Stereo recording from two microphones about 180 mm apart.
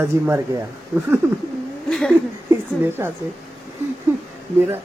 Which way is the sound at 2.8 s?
10° right (ahead or behind).